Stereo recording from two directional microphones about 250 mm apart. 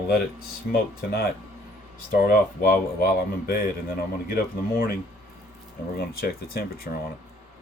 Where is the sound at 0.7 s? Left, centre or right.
Left.